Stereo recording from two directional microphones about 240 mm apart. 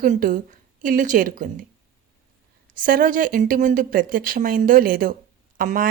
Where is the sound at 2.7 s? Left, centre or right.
Right.